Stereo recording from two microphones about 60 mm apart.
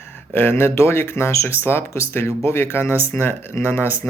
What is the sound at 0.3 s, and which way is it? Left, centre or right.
Speech, left.